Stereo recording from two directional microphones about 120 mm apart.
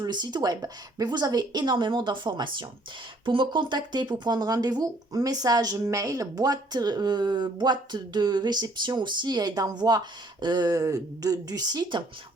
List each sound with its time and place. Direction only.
0.0 s speech: 35° right (ahead or behind)